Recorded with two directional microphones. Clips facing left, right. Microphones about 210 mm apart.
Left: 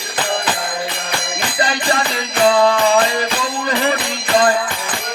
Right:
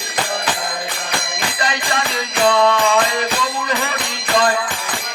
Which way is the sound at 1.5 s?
30° left (ahead or behind).